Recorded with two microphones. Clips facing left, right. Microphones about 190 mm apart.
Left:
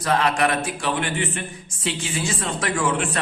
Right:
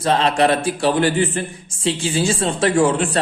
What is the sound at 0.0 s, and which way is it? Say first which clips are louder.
A man's voice: right 4 dB; 30° right (ahead or behind).